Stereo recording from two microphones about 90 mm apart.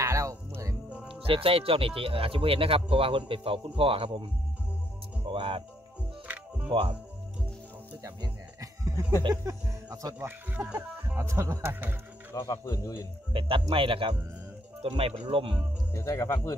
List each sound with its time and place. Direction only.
0.0 s music: 35° right (ahead or behind)
1.0 s speech: 85° right
6.2 s music: 20° right (ahead or behind)
6.7 s speech: 70° right (ahead or behind)
8.0 s music: 40° right (ahead or behind)
10.1 s speech: 20° right (ahead or behind)
11.1 s speech: 30° right (ahead or behind)
12.4 s speech: 45° left (ahead or behind)
13.3 s speech: 80° right
15.9 s speech: 30° left (ahead or behind)